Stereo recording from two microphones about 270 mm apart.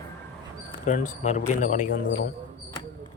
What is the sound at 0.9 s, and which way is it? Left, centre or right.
Speech, left.